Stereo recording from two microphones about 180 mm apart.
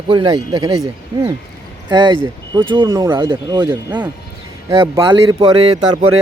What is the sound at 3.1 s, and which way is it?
Speech, 25° right (ahead or behind).